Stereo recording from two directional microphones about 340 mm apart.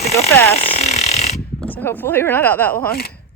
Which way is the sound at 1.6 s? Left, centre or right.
Centre.